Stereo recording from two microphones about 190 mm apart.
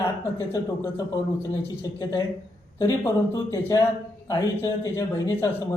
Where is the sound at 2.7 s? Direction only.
15° left (ahead or behind).